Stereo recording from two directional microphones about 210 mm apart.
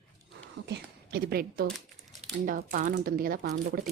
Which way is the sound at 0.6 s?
50° right (ahead or behind).